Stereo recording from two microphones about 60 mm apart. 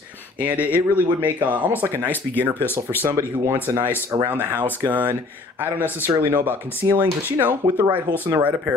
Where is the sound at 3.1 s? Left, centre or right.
Right.